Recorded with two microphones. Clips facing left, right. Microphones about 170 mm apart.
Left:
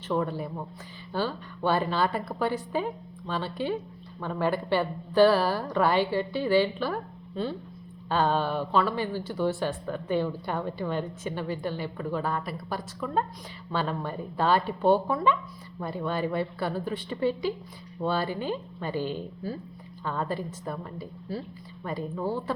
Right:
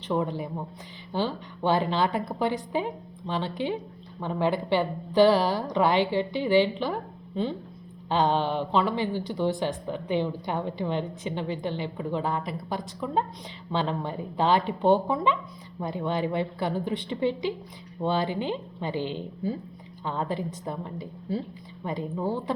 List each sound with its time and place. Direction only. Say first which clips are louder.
0.1 s a woman's voice: right 1 dB; 15° right (ahead or behind)